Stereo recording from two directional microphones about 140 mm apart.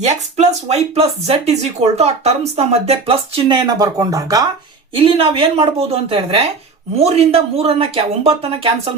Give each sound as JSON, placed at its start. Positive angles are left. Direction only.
{"t": 0.1, "sound": "speech", "side_deg": -50}
{"t": 3.7, "sound": "speech", "side_deg": -25}
{"t": 4.9, "sound": "a woman's voice", "side_deg": -40}